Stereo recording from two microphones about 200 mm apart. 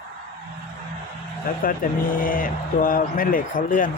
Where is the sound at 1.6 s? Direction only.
45° left (ahead or behind).